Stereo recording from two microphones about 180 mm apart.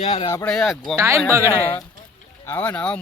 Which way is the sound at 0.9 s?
15° right (ahead or behind).